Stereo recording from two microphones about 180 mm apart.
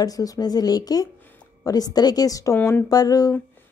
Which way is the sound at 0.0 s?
20° left (ahead or behind).